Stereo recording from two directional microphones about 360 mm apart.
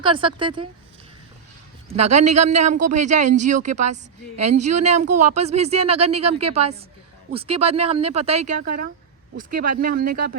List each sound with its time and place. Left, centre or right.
0.0 s speech: centre
2.0 s speech: centre